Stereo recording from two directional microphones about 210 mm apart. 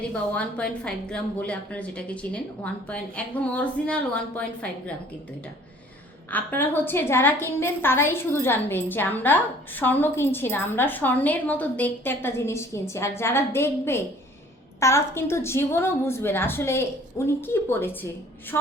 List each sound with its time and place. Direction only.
0.1 s a woman's voice: 5° left (ahead or behind)
6.3 s a woman's voice: 10° left (ahead or behind)